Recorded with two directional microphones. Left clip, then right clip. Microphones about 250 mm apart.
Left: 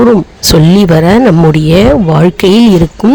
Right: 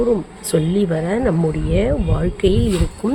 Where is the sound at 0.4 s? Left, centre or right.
Left.